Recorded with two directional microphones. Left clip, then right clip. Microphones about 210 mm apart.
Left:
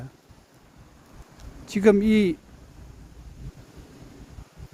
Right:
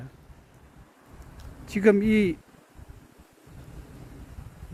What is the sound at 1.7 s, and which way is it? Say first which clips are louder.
Speech: left 2 dB; 20° left (ahead or behind).